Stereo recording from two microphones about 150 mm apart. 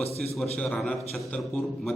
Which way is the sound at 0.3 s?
5° left (ahead or behind).